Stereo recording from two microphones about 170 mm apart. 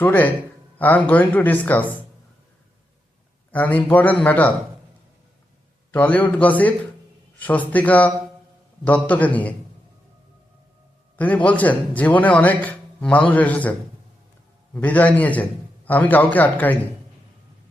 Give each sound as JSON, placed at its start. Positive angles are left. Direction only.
{"t": 0.0, "sound": "a man's voice", "side_deg": 10}
{"t": 3.5, "sound": "a man's voice", "side_deg": 10}
{"t": 5.9, "sound": "a man's voice", "side_deg": 10}
{"t": 11.2, "sound": "a man's voice", "side_deg": 10}
{"t": 14.8, "sound": "a man's voice", "side_deg": 10}